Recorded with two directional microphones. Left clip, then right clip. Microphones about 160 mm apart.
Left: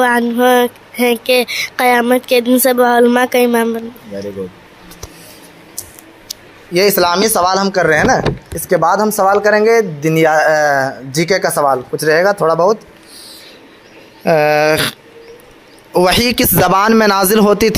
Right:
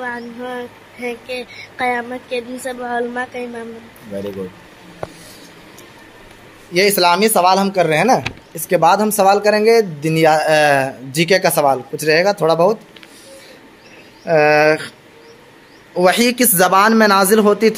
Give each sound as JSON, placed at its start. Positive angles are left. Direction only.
{"t": 0.0, "sound": "a sound", "side_deg": 90}
{"t": 6.7, "sound": "speech", "side_deg": 30}
{"t": 7.0, "sound": "speech", "side_deg": 15}
{"t": 8.6, "sound": "speech", "side_deg": -10}
{"t": 9.2, "sound": "speech", "side_deg": 0}
{"t": 10.5, "sound": "speech", "side_deg": -15}
{"t": 11.5, "sound": "speech", "side_deg": 5}
{"t": 14.2, "sound": "a man's voice", "side_deg": 65}